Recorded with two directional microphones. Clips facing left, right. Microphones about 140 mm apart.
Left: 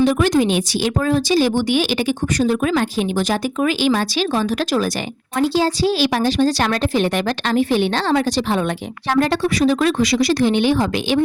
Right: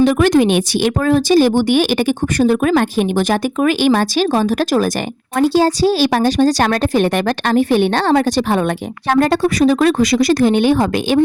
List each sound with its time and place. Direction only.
0.0 s a woman's voice: 65° right (ahead or behind); by 11.2 s 50° right (ahead or behind)